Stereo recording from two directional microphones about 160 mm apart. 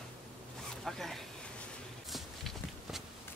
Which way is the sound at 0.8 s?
Centre (ahead or behind).